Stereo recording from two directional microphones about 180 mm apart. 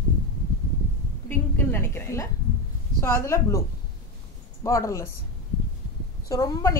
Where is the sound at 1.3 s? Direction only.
10° left (ahead or behind).